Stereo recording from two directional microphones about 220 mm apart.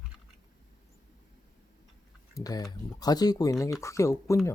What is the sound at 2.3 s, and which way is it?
Speech, 15° left (ahead or behind).